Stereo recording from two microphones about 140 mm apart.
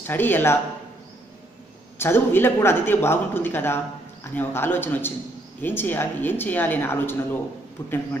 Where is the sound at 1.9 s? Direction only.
15° left (ahead or behind).